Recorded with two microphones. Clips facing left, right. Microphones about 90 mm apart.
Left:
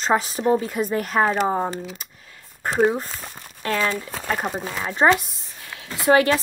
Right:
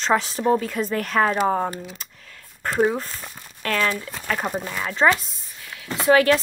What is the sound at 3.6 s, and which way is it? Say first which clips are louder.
Speech: even; 25° left (ahead or behind).